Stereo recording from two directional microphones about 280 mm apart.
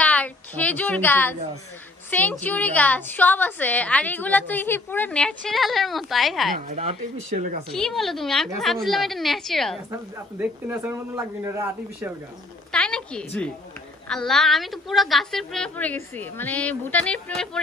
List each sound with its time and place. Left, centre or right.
0.0 s a sound: centre
2.0 s a woman's voice: centre
6.7 s speech: right
7.7 s a woman's voice: centre
12.7 s a woman's voice: centre